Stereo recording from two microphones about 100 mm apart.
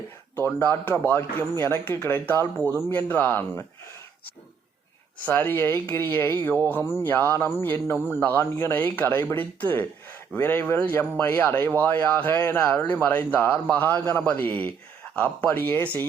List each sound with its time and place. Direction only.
0.3 s speech: 20° left (ahead or behind)
5.2 s speech: 15° left (ahead or behind)